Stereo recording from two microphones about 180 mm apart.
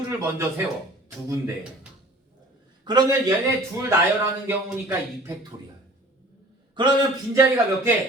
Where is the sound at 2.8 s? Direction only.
25° right (ahead or behind).